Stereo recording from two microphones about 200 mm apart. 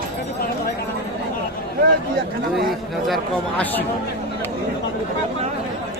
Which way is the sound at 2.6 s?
Centre (ahead or behind).